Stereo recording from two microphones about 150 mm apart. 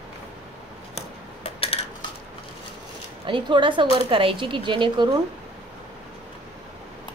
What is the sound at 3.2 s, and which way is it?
Speech, 30° right (ahead or behind).